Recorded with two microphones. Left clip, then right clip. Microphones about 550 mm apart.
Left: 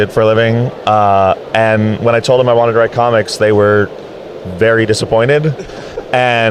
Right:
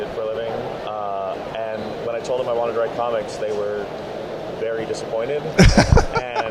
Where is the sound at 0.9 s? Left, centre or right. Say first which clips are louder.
Left 18 dB; left.